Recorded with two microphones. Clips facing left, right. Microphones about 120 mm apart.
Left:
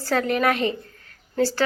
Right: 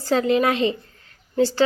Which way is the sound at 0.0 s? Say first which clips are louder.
Right 3 dB; 20° right (ahead or behind).